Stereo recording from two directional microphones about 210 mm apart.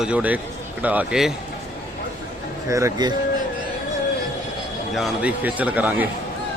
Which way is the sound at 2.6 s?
15° right (ahead or behind).